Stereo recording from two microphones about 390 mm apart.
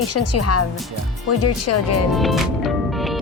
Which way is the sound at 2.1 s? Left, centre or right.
Centre.